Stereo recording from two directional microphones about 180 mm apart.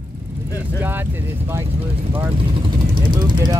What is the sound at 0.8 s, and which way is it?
Vehicle, 10° right (ahead or behind).